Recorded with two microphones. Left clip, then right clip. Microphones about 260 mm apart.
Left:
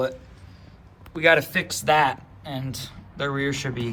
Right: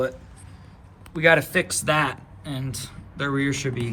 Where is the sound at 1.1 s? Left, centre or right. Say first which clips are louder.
Right 1 dB; left.